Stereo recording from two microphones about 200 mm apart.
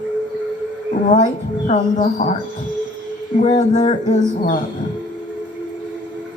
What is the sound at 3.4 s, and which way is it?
A woman's voice, 35° left (ahead or behind).